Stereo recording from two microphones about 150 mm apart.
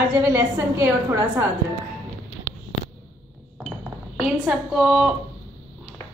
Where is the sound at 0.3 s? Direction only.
20° right (ahead or behind).